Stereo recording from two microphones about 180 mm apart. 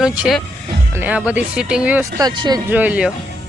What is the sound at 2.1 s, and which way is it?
Speech, 25° right (ahead or behind).